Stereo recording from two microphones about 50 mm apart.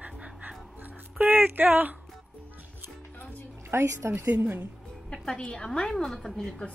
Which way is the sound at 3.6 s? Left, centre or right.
Right.